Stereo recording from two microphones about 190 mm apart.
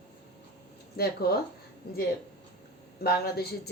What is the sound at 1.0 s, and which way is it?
Speech, 55° left (ahead or behind).